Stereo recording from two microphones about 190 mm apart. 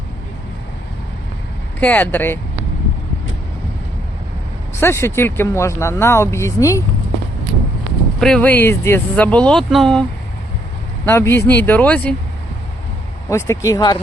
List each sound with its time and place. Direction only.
1.8 s speech: 10° left (ahead or behind)
4.8 s speech: 15° left (ahead or behind)
8.2 s speech: 5° left (ahead or behind)
13.3 s speech: 15° left (ahead or behind)